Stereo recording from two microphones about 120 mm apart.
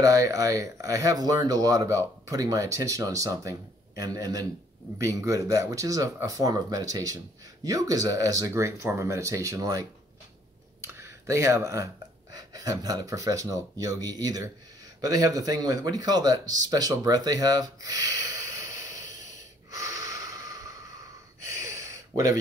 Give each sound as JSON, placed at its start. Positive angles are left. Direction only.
{"t": 0.0, "sound": "speech", "side_deg": -30}
{"t": 19.7, "sound": "snort", "side_deg": -30}
{"t": 21.5, "sound": "a sound", "side_deg": -25}